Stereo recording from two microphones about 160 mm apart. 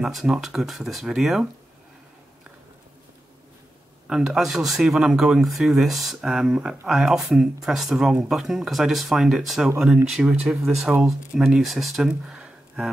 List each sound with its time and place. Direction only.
0.0 s speech: centre (ahead or behind)
4.1 s speech: 5° right (ahead or behind)